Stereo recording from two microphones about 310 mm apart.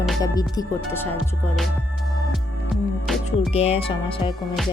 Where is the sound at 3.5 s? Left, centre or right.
Centre.